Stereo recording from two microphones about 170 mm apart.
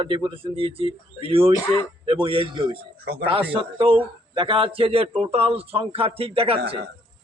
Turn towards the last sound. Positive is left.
turn(degrees=-35)  # may be behind; listen again after turning